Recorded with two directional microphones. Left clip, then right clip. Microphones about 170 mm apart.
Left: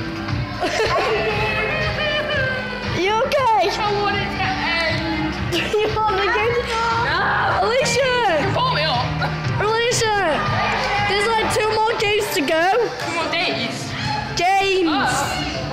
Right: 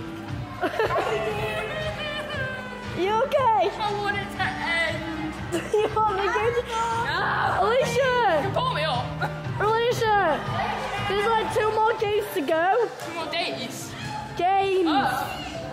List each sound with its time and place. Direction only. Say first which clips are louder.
0.7 s a sound: left 5 dB; 10° left (ahead or behind)
3.0 s music: left 4 dB; 5° left (ahead or behind)
3.3 s a sound: left 3 dB; 5° left (ahead or behind)
4.0 s music: left 6 dB; 20° right (ahead or behind)
5.8 s music: left 3 dB; centre (ahead or behind)
8.5 s music: left 6 dB; 10° right (ahead or behind)
9.6 s music: left 3 dB; 5° left (ahead or behind)
11.1 s a woman's voice: left 1 dB; 5° left (ahead or behind)
14.4 s a woman's voice: left 4 dB; centre (ahead or behind)